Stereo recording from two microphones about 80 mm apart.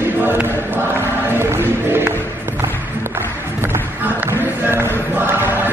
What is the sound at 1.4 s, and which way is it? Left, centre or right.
Music, right.